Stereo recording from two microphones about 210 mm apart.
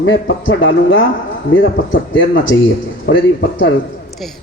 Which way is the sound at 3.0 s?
60° left (ahead or behind).